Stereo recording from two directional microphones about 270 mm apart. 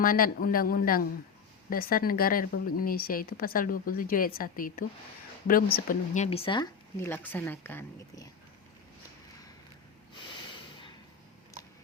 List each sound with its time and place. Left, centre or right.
0.0 s a woman's voice: left; by 8.3 s centre